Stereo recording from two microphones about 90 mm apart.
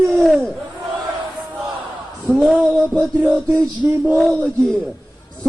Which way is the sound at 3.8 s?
15° right (ahead or behind).